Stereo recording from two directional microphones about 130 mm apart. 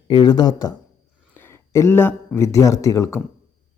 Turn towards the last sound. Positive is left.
turn(degrees=25)  # may be behind; listen again after turning